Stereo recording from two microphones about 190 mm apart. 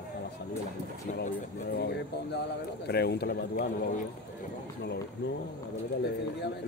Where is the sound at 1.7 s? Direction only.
60° left (ahead or behind); by 4.1 s 45° left (ahead or behind).